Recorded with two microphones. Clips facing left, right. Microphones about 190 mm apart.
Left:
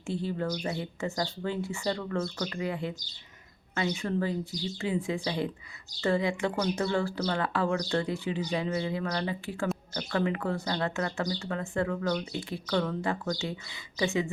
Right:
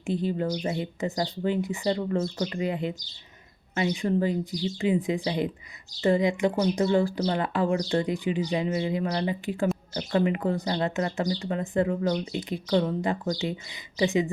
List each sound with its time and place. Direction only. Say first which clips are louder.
0.0 s speech: right 4 dB; 15° right (ahead or behind)